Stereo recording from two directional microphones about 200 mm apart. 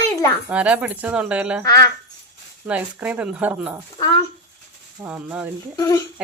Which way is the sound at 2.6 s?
5° right (ahead or behind).